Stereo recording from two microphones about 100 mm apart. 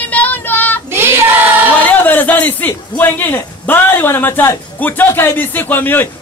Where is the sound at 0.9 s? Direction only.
25° right (ahead or behind).